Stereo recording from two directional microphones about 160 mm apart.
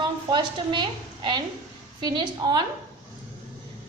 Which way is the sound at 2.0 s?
25° right (ahead or behind).